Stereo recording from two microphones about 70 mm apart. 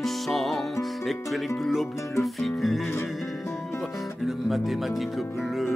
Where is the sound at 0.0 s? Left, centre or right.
Centre.